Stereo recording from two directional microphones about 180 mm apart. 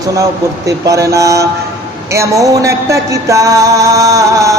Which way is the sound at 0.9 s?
20° right (ahead or behind).